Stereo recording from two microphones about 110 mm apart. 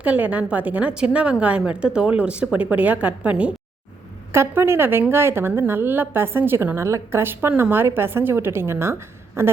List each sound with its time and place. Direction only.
0.0 s a woman's voice: 15° right (ahead or behind)
4.3 s a woman's voice: 25° right (ahead or behind)